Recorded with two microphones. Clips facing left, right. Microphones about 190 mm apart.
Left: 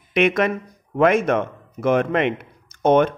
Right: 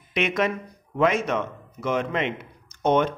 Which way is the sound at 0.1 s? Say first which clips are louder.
Left 6 dB; 55° left (ahead or behind).